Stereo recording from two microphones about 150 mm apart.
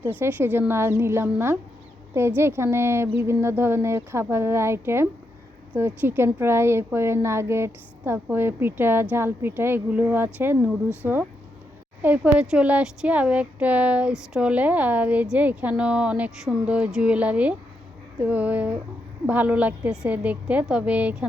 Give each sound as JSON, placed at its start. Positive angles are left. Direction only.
{"t": 0.0, "sound": "speech", "side_deg": -15}